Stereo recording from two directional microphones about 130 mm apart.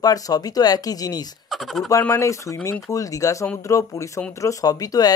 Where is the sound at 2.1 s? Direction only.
25° left (ahead or behind).